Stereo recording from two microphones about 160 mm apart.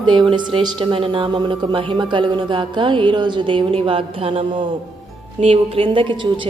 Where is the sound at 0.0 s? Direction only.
25° right (ahead or behind).